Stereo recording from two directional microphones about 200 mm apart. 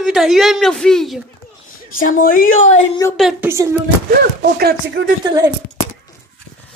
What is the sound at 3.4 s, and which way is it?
Speech, 10° right (ahead or behind).